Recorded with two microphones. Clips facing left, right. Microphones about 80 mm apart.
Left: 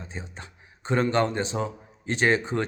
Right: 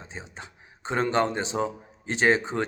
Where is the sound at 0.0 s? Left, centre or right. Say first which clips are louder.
Left 1 dB; right.